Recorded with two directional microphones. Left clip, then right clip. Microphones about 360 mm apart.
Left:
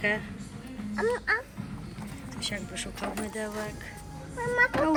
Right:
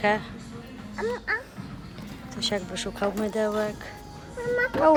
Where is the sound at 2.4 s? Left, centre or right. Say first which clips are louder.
Right 6 dB; centre.